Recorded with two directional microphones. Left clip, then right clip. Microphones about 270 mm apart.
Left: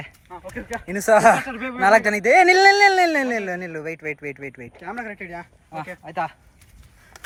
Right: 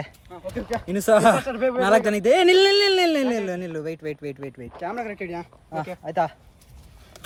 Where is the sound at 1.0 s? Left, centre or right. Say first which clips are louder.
Left 3 dB; left.